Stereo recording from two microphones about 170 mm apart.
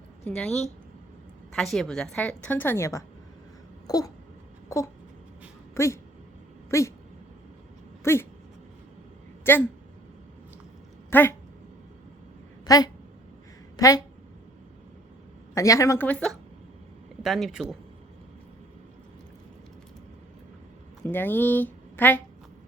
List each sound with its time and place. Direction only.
0.3 s speech: 5° left (ahead or behind)
1.5 s a woman's voice: centre (ahead or behind)
3.8 s a sound: 20° left (ahead or behind)
5.7 s speech: 15° left (ahead or behind)
8.0 s speech: 15° left (ahead or behind)
9.4 s a sound: 10° left (ahead or behind)
11.1 s speech: 10° left (ahead or behind)
12.6 s speech: 20° left (ahead or behind)
15.5 s a woman's voice: 20° left (ahead or behind); by 17.7 s centre (ahead or behind)
21.0 s speech: 10° left (ahead or behind)